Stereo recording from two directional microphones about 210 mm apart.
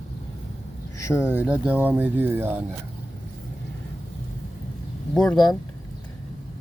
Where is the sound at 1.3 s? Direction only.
10° right (ahead or behind).